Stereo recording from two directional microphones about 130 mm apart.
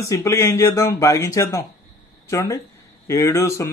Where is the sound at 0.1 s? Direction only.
20° left (ahead or behind).